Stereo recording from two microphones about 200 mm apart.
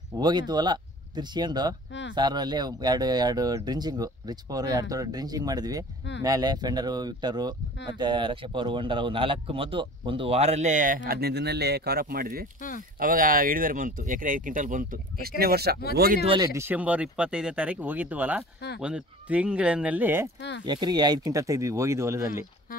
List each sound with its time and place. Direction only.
0.2 s speech: 20° right (ahead or behind); by 15.8 s 50° right (ahead or behind)
16.5 s speech: 10° right (ahead or behind)
20.6 s speech: 20° right (ahead or behind)